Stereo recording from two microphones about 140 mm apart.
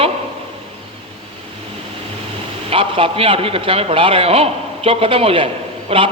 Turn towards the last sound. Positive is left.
turn(degrees=-40)  # may be behind; listen again after turning